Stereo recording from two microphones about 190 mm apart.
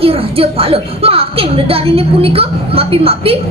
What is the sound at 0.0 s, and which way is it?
A woman's voice, 30° right (ahead or behind).